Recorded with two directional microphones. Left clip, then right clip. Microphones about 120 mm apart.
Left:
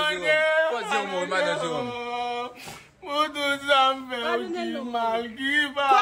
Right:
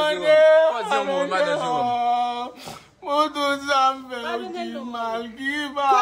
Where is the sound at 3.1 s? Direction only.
70° right (ahead or behind).